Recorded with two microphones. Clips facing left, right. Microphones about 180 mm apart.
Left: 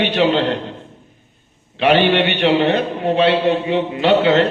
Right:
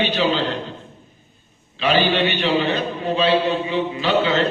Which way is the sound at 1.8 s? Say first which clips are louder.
Left 4 dB; 65° left (ahead or behind).